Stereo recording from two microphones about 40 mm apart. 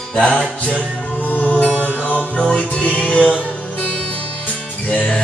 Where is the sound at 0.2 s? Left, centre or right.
Left.